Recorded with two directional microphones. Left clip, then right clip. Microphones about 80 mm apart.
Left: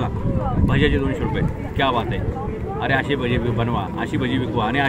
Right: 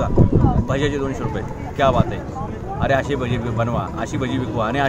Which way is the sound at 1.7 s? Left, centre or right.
Right.